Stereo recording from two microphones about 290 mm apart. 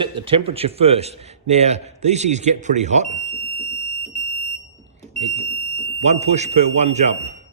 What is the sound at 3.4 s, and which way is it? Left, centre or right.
Fire alarm, centre.